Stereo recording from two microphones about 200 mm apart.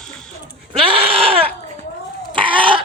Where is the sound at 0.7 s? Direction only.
30° right (ahead or behind).